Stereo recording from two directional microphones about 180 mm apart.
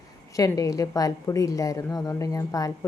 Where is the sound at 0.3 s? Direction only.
20° left (ahead or behind).